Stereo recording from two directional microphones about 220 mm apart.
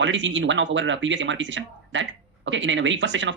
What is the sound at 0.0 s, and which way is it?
Speech, 55° right (ahead or behind).